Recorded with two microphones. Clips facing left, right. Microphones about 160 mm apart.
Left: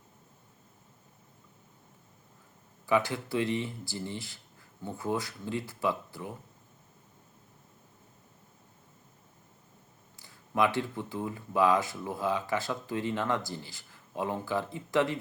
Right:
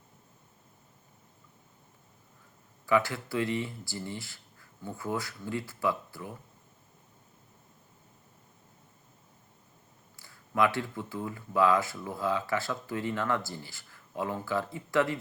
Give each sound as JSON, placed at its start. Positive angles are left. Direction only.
{"t": 2.8, "sound": "speech", "side_deg": 20}
{"t": 10.2, "sound": "speech", "side_deg": 20}